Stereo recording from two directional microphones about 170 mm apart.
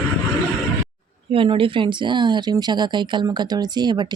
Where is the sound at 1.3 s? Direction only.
30° right (ahead or behind).